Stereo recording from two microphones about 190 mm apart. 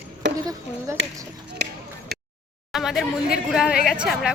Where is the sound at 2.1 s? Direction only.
55° right (ahead or behind).